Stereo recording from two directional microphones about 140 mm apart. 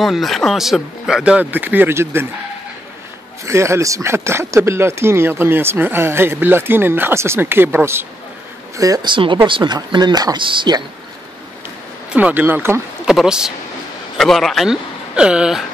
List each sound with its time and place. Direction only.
0.0 s speech: centre (ahead or behind); by 2.2 s 15° right (ahead or behind)
3.4 s speech: 20° right (ahead or behind); by 10.8 s 35° right (ahead or behind)
12.1 s speech: 10° right (ahead or behind)
13.0 s speech: 5° right (ahead or behind)